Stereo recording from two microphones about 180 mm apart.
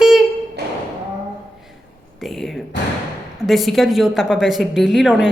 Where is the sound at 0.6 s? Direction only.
65° right (ahead or behind).